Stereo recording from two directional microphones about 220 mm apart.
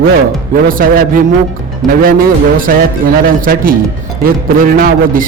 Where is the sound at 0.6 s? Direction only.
40° right (ahead or behind).